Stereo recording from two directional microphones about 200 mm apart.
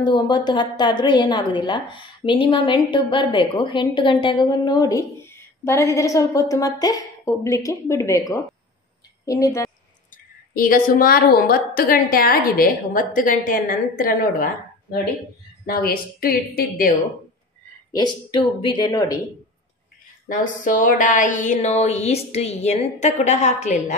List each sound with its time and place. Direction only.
0.0 s a woman's voice: 25° left (ahead or behind)
10.5 s a woman's voice: 45° left (ahead or behind)
17.9 s a woman's voice: 20° left (ahead or behind)
20.2 s a woman's voice: 40° left (ahead or behind)